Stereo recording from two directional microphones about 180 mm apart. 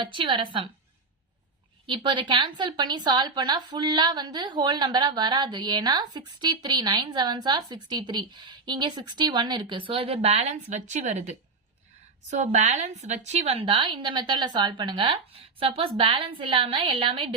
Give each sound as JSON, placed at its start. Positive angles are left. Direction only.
{"t": 0.0, "sound": "a woman's voice", "side_deg": -25}
{"t": 1.9, "sound": "a woman's voice", "side_deg": -25}